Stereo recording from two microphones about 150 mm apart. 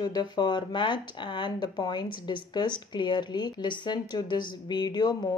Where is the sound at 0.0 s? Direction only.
30° left (ahead or behind).